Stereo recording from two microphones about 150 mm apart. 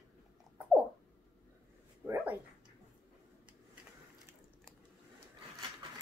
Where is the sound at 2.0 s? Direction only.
10° right (ahead or behind).